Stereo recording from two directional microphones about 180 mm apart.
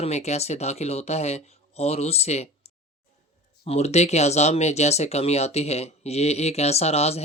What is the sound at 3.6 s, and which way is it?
Speech, 35° left (ahead or behind).